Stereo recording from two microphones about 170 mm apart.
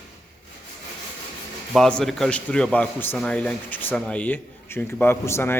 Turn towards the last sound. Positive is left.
turn(degrees=15)  # may be behind; listen again after turning